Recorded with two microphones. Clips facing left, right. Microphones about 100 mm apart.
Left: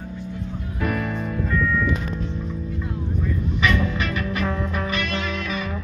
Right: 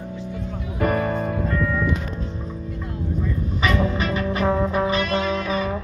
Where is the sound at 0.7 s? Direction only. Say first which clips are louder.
Right 4 dB; 45° right (ahead or behind).